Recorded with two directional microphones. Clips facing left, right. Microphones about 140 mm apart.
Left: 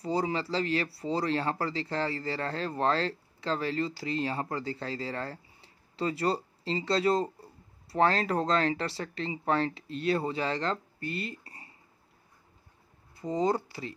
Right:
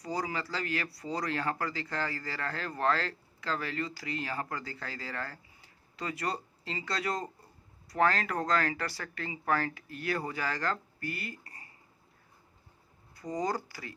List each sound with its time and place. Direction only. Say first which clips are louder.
0.0 s speech: left 5 dB; 25° left (ahead or behind)
13.1 s speech: left 5 dB; 25° left (ahead or behind)